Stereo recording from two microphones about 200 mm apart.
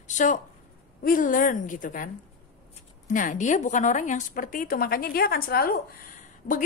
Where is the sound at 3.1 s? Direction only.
40° left (ahead or behind).